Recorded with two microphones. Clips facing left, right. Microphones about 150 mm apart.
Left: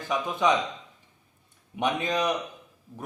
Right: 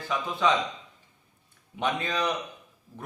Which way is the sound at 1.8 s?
15° left (ahead or behind).